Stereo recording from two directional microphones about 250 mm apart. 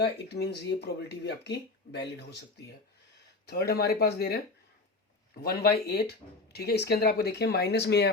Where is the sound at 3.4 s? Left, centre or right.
Left.